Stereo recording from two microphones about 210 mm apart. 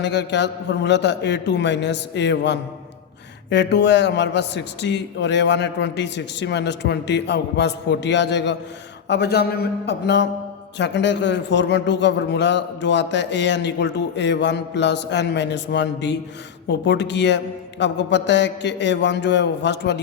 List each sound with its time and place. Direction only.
0.0 s a man's voice: 55° left (ahead or behind)